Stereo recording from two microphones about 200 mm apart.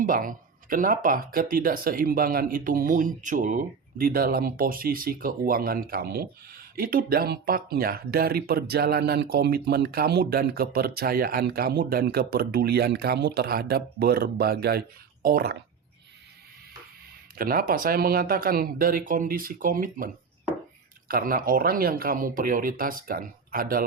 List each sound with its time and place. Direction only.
0.0 s speech: 45° right (ahead or behind)
17.3 s speech: 45° right (ahead or behind)
21.1 s speech: 45° right (ahead or behind)